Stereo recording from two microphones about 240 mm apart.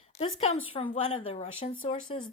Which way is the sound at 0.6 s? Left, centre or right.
Left.